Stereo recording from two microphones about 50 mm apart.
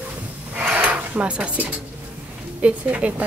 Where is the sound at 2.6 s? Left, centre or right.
Right.